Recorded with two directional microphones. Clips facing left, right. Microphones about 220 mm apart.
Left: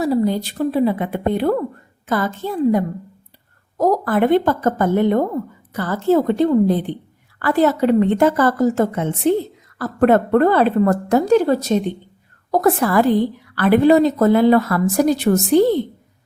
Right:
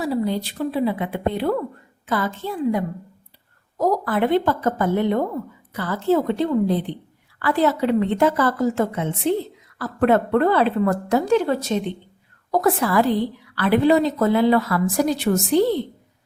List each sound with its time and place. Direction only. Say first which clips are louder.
0.0 s a woman's voice: left 5 dB; 40° left (ahead or behind)